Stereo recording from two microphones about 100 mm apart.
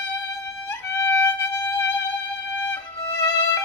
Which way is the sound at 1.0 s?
30° left (ahead or behind).